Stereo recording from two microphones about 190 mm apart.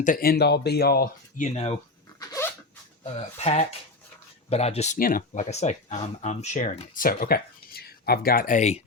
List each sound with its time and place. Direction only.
0.0 s speech: 45° left (ahead or behind)
2.1 s dog: 15° left (ahead or behind)
3.2 s speech: 35° left (ahead or behind)